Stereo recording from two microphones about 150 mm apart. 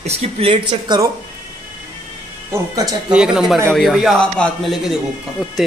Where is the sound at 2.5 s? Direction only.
25° right (ahead or behind).